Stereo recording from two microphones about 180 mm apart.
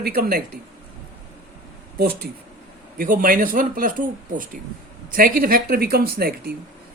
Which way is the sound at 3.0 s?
50° right (ahead or behind).